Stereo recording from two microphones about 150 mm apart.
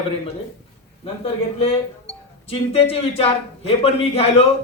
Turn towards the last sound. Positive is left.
turn(degrees=40)  # may be behind; listen again after turning